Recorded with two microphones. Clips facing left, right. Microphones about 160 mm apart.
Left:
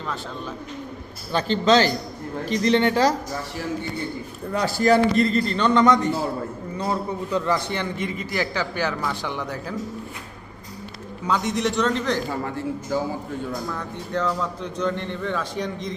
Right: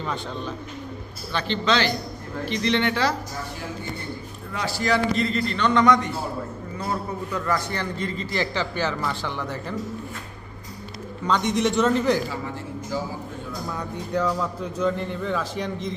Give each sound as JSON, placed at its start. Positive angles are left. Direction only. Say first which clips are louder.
{"t": 1.3, "sound": "a man's voice", "louder": "left 5 dB", "side_deg": 40}
{"t": 4.5, "sound": "a man's voice", "louder": "left 6 dB", "side_deg": 45}
{"t": 7.3, "sound": "a man's voice", "louder": "left 3 dB", "side_deg": 25}
{"t": 11.3, "sound": "a man's voice", "louder": "right 1 dB", "side_deg": 5}
{"t": 13.7, "sound": "a man's voice", "louder": "right 1 dB", "side_deg": -10}